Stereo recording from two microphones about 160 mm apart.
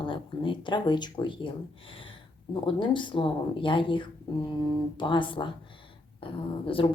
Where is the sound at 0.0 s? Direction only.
30° left (ahead or behind).